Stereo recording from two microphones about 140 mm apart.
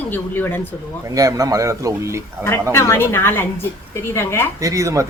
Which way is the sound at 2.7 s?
20° left (ahead or behind).